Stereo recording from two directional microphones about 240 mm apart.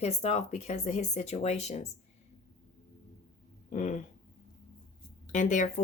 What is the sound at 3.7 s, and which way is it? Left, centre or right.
Speech, left.